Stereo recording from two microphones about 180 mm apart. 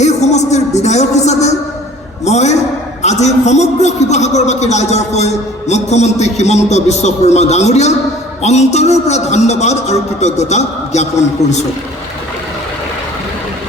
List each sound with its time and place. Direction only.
0.0 s a man's voice: 40° left (ahead or behind)